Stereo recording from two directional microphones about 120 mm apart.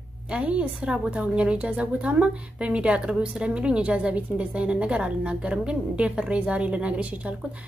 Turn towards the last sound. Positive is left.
turn(degrees=-10)  # may be behind; listen again after turning